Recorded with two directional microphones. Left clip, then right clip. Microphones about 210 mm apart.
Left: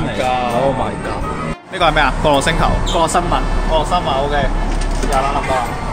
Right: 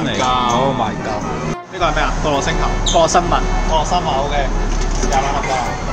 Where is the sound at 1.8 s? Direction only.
45° left (ahead or behind).